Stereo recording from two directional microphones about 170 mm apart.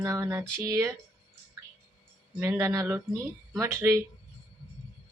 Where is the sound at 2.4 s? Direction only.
15° right (ahead or behind).